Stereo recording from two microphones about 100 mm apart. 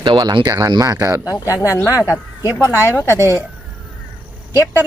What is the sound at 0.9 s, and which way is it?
Speech, 30° right (ahead or behind).